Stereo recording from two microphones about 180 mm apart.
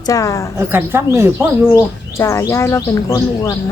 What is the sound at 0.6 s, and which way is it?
Speech, 15° right (ahead or behind).